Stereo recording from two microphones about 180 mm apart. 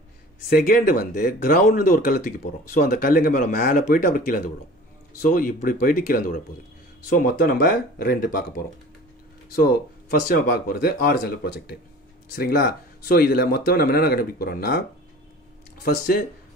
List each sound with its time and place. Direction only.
0.5 s speech: 50° left (ahead or behind)
10.2 s speech: 55° left (ahead or behind)
15.8 s speech: 55° left (ahead or behind)